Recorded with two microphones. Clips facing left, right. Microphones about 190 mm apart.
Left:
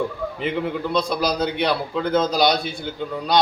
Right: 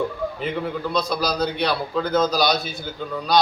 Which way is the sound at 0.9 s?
25° left (ahead or behind).